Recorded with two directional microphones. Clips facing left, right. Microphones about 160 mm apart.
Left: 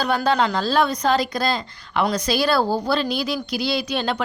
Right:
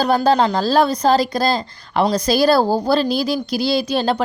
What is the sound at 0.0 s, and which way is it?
Speech, 35° right (ahead or behind).